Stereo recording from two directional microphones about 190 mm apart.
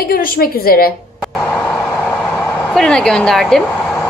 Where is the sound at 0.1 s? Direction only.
50° left (ahead or behind).